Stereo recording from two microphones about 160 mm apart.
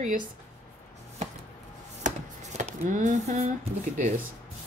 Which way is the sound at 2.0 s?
45° right (ahead or behind).